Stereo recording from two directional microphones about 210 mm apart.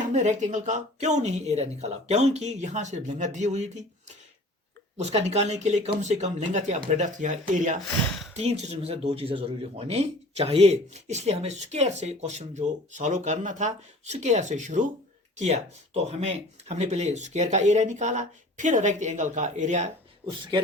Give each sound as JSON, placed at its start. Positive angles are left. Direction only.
{"t": 0.0, "sound": "speech", "side_deg": -35}
{"t": 4.9, "sound": "speech", "side_deg": -30}